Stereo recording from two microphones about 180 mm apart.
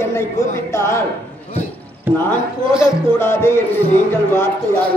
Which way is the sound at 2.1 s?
10° right (ahead or behind).